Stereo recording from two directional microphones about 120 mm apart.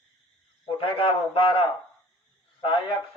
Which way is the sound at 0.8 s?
45° left (ahead or behind).